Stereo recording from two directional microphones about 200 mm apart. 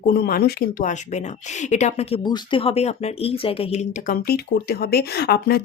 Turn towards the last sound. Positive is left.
turn(degrees=50)  # may be behind; listen again after turning